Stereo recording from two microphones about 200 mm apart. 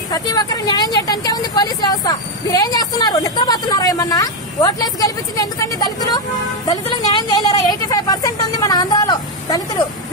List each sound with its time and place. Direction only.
0.1 s speech: 20° left (ahead or behind)
6.7 s vehicle: 20° left (ahead or behind)